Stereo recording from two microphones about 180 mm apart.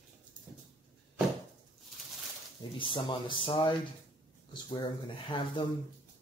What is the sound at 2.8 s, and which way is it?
Speech, 25° left (ahead or behind).